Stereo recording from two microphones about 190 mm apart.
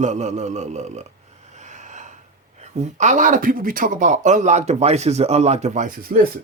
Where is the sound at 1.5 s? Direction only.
40° right (ahead or behind).